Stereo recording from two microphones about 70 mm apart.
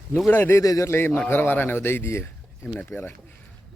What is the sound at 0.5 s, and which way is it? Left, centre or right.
Speech, left.